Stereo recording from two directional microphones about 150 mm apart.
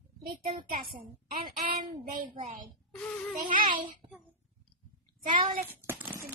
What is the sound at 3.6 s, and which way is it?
Speech, 35° right (ahead or behind).